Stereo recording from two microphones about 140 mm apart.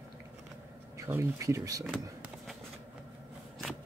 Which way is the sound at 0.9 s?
20° right (ahead or behind).